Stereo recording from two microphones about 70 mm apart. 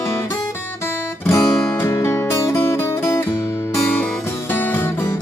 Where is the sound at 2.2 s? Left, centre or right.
Left.